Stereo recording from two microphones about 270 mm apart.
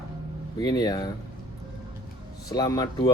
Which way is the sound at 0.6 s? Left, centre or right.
Centre.